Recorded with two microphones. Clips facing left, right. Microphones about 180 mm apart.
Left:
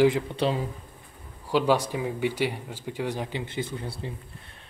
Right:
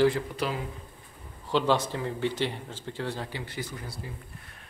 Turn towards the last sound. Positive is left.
turn(degrees=25)  # may be behind; listen again after turning